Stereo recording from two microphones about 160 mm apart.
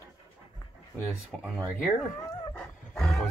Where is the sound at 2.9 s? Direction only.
5° left (ahead or behind).